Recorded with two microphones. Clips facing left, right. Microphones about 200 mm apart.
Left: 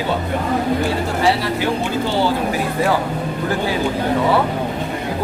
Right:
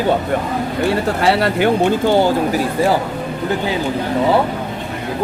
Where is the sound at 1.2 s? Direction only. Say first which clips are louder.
Right 3 dB; 65° right (ahead or behind).